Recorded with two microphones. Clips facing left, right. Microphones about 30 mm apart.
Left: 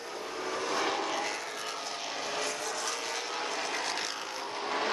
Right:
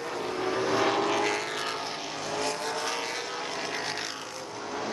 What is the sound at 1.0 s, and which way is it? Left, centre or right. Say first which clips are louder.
Vehicle: right 6 dB; right.